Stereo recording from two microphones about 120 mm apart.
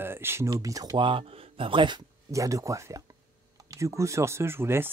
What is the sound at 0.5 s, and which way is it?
Speech, 30° right (ahead or behind).